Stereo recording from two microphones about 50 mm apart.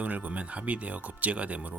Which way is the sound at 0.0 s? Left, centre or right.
Right.